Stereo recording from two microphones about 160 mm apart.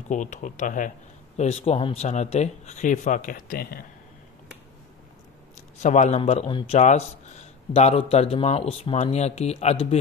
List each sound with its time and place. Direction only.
0.1 s speech: 50° left (ahead or behind)
5.8 s speech: 45° left (ahead or behind)
6.8 s a man's voice: 45° left (ahead or behind)